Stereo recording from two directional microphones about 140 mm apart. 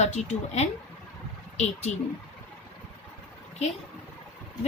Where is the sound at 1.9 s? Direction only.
55° left (ahead or behind).